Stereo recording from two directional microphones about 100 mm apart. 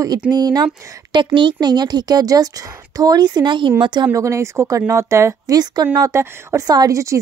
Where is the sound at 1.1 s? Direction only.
55° right (ahead or behind).